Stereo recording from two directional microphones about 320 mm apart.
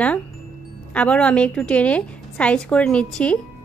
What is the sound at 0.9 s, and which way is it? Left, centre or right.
Speech, centre.